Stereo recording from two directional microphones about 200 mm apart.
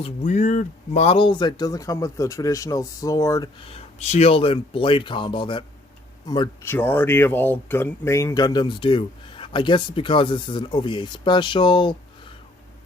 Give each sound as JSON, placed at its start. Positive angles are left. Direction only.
{"t": 0.0, "sound": "speech", "side_deg": 35}
{"t": 3.7, "sound": "speech", "side_deg": 30}